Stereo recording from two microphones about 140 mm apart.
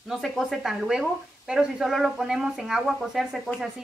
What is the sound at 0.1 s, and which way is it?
Speech, centre (ahead or behind).